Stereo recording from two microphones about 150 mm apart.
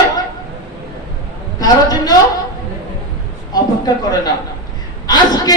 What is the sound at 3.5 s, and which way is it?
A woman's voice, 25° left (ahead or behind).